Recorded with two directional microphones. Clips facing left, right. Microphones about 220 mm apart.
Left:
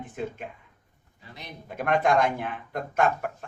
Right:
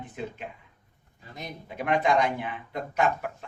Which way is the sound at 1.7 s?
50° left (ahead or behind).